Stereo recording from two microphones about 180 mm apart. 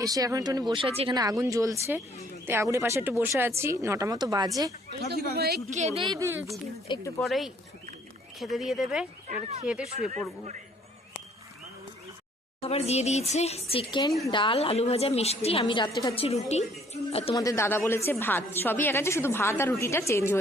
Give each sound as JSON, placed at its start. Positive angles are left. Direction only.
{"t": 0.0, "sound": "speech", "side_deg": -20}
{"t": 0.7, "sound": "speech", "side_deg": -30}
{"t": 1.1, "sound": "speech", "side_deg": -20}
{"t": 4.9, "sound": "speech", "side_deg": -65}
{"t": 5.7, "sound": "speech", "side_deg": -35}
{"t": 6.8, "sound": "speech", "side_deg": 25}
{"t": 7.2, "sound": "speech", "side_deg": 0}
{"t": 12.6, "sound": "a woman's voice", "side_deg": 35}
{"t": 17.3, "sound": "a woman's voice", "side_deg": 20}